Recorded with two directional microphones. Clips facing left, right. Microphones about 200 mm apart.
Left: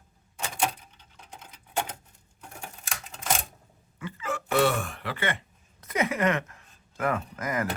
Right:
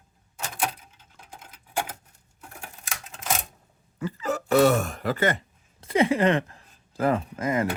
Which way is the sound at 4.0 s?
40° right (ahead or behind).